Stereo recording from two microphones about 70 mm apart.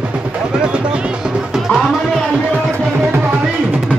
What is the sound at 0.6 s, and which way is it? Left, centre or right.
Music, centre.